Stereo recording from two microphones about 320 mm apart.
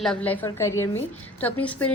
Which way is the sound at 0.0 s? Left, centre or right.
Centre.